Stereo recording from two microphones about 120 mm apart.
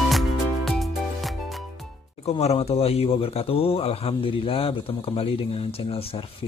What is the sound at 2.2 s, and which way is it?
A man's voice, 60° left (ahead or behind).